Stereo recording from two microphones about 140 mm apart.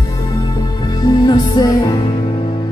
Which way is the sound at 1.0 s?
30° left (ahead or behind).